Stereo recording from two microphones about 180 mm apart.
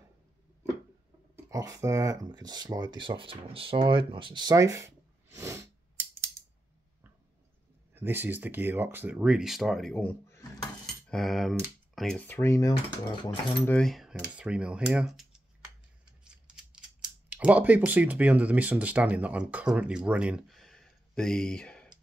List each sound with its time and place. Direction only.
1.3 s speech: 20° right (ahead or behind)
7.9 s speech: 10° right (ahead or behind); by 10.5 s 15° left (ahead or behind)
11.1 s speech: centre (ahead or behind); by 12.7 s 20° left (ahead or behind)
12.7 s speech: 30° left (ahead or behind)
13.7 s speech: 5° left (ahead or behind)
17.3 s speech: 10° right (ahead or behind)